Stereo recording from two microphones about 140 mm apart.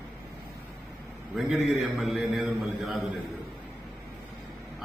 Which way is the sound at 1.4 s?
Centre (ahead or behind).